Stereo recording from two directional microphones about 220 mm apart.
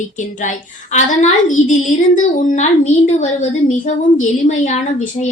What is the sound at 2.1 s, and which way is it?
A woman's voice, 30° left (ahead or behind).